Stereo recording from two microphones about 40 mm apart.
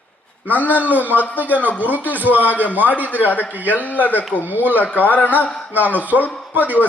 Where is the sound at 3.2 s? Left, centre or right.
Left.